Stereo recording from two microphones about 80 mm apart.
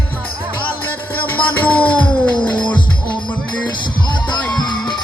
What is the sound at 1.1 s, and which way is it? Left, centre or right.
Music, left.